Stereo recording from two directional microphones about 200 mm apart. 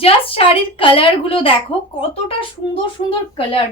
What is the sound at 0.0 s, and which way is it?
A woman's voice, 25° left (ahead or behind).